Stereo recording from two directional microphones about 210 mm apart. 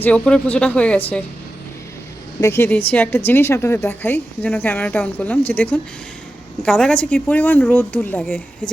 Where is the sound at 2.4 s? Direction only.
10° left (ahead or behind).